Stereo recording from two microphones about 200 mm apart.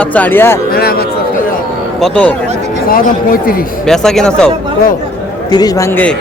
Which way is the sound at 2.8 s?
45° left (ahead or behind).